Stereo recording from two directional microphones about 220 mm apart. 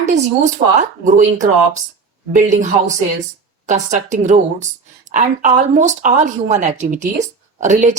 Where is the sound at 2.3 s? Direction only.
35° right (ahead or behind).